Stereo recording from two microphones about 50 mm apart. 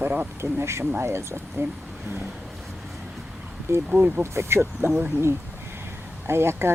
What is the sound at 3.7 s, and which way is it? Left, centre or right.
Speech, right.